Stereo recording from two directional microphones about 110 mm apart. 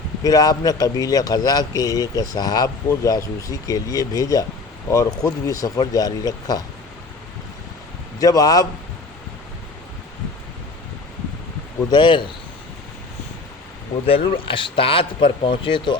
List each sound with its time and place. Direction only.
0.2 s speech: 35° left (ahead or behind)
8.2 s speech: 35° left (ahead or behind)
11.9 s speech: 45° left (ahead or behind)
14.1 s speech: 50° left (ahead or behind)